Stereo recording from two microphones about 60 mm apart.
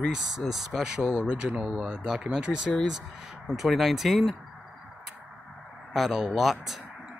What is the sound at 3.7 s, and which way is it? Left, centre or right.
Speech, centre.